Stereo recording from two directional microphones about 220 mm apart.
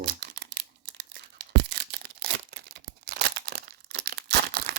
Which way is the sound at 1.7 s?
50° right (ahead or behind).